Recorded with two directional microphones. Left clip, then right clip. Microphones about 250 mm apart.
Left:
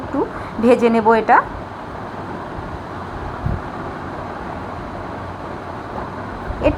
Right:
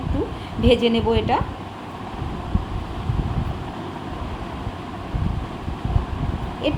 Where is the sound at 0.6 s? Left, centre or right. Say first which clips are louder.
Left 5 dB; left.